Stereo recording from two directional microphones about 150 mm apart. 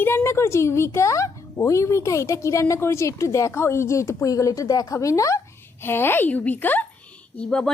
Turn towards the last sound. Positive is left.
turn(degrees=5)  # may be behind; listen again after turning